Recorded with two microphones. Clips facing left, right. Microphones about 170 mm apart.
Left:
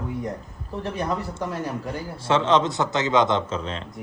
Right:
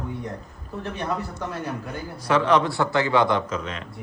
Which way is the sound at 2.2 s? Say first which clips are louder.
Even; 25° left (ahead or behind).